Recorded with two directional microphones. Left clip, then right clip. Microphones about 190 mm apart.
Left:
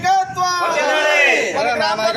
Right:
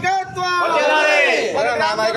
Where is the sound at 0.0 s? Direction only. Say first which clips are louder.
Left 4 dB; 10° right (ahead or behind).